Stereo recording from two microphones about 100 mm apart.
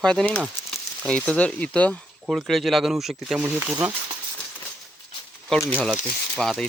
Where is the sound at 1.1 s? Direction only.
10° left (ahead or behind).